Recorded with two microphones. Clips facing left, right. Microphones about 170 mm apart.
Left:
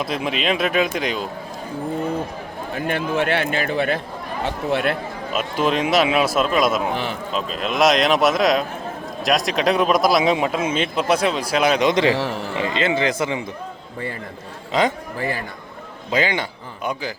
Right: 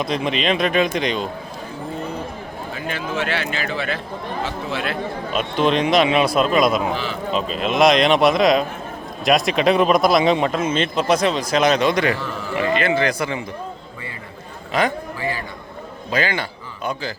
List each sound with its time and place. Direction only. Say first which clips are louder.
0.0 s speech: right 2 dB; 5° left (ahead or behind)
2.7 s a man's voice: left 4 dB; 55° left (ahead or behind)
5.3 s speech: right 2 dB; 5° left (ahead or behind)
6.9 s a man's voice: even; 60° left (ahead or behind)
7.3 s speech: right 3 dB; centre (ahead or behind); by 12.1 s 20° left (ahead or behind)
12.1 s a man's voice: left 4 dB; 75° left (ahead or behind)
12.5 s speech: right 3 dB; 20° left (ahead or behind)
14.7 s a man's voice: left 1 dB; 20° left (ahead or behind)
16.1 s a man's voice: left 1 dB; 20° left (ahead or behind)